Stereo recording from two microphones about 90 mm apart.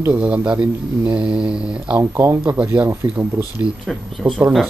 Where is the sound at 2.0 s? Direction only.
30° right (ahead or behind).